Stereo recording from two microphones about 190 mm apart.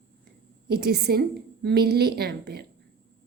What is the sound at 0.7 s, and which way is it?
A woman's voice, 60° right (ahead or behind).